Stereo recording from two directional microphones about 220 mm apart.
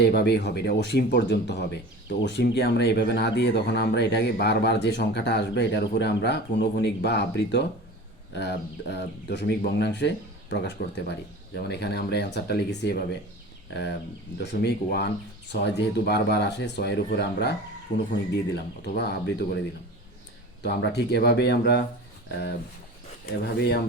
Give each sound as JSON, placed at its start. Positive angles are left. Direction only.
{"t": 0.0, "sound": "speech", "side_deg": 50}
{"t": 14.3, "sound": "speech", "side_deg": 50}
{"t": 18.5, "sound": "speech", "side_deg": 45}
{"t": 20.6, "sound": "speech", "side_deg": 50}